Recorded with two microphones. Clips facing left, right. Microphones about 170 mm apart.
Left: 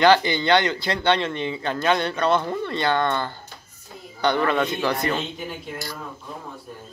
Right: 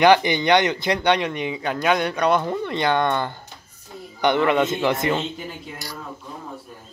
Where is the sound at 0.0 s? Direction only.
15° right (ahead or behind).